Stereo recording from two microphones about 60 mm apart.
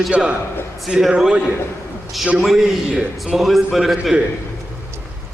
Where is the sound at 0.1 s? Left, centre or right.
Centre.